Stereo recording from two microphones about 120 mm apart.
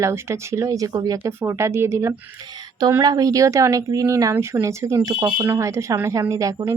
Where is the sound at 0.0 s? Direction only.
25° right (ahead or behind).